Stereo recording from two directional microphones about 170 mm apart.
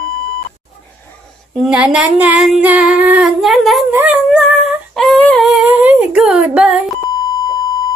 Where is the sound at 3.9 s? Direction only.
10° right (ahead or behind).